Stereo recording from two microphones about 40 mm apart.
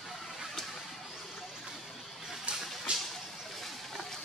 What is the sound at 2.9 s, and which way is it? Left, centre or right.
Vehicle, right.